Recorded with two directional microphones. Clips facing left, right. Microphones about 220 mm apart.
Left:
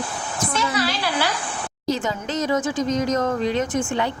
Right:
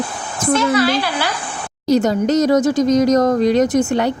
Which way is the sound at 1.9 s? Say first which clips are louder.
Right 11 dB; 40° right (ahead or behind).